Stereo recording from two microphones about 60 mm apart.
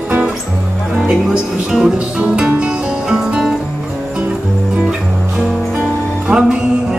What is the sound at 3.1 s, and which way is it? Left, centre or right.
Music, centre.